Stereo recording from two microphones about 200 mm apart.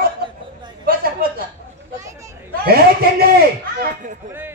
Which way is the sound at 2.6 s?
50° right (ahead or behind).